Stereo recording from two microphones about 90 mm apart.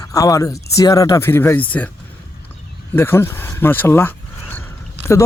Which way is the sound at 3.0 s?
25° left (ahead or behind).